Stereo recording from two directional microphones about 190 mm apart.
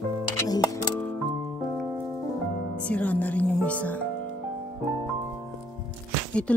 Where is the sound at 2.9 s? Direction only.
5° left (ahead or behind).